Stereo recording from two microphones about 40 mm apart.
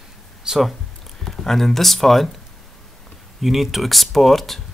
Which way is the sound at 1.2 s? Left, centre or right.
Centre.